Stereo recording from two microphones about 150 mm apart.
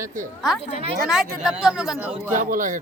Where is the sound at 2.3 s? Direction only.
65° right (ahead or behind).